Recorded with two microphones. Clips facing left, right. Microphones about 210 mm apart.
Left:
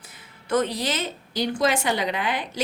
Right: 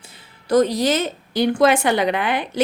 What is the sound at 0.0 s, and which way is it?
A woman's voice, 30° right (ahead or behind).